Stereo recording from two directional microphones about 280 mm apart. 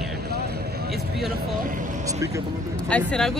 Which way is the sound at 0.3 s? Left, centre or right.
Right.